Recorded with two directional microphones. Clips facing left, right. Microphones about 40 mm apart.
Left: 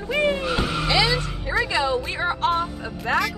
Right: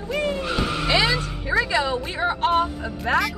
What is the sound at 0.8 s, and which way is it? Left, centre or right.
Speech, right.